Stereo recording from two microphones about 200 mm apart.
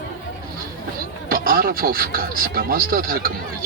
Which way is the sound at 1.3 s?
45° right (ahead or behind).